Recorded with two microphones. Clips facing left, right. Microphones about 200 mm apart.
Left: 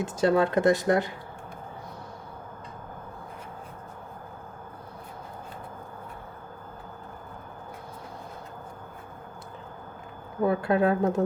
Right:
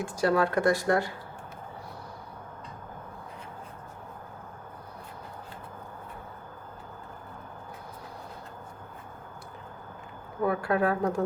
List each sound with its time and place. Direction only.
0.0 s speech: 25° left (ahead or behind)
10.4 s speech: 25° left (ahead or behind)